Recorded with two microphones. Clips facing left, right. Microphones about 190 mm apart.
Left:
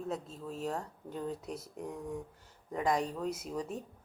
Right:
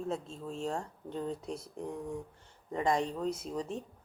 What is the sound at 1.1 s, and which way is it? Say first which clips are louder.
Speech: right 2 dB; 25° right (ahead or behind).